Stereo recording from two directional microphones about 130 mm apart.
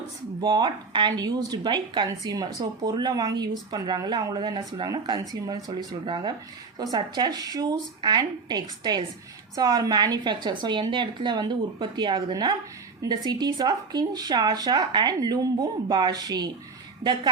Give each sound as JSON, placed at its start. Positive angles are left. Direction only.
{"t": 0.4, "sound": "a woman's voice", "side_deg": -35}